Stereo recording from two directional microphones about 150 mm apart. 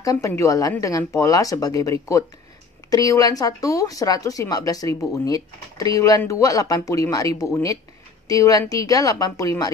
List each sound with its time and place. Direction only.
0.0 s a woman's voice: 25° left (ahead or behind)